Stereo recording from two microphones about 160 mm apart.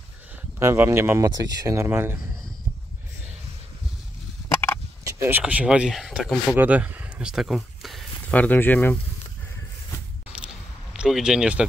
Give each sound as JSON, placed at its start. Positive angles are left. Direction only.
{"t": 0.4, "sound": "speech", "side_deg": -15}
{"t": 5.2, "sound": "speech", "side_deg": -10}
{"t": 10.9, "sound": "speech", "side_deg": 0}